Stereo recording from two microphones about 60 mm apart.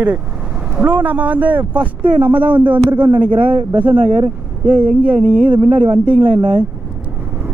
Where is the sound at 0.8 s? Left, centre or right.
Right.